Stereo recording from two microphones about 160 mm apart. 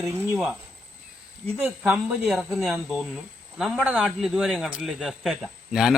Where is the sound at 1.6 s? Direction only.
5° right (ahead or behind).